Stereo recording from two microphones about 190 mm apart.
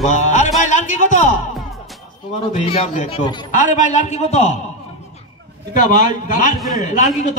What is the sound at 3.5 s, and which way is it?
A man's voice, 40° left (ahead or behind).